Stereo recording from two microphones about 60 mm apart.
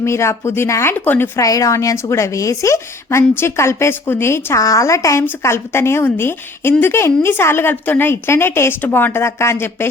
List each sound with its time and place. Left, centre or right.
0.0 s speech: left
0.9 s a woman's voice: left
1.4 s speech: left
4.5 s a woman's voice: left
5.4 s a woman's voice: left
9.2 s speech: left